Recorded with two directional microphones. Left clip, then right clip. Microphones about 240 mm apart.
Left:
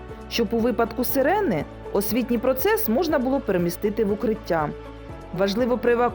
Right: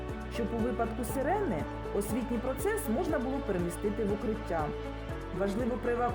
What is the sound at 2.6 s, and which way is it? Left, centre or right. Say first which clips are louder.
Speech: left 9 dB; left.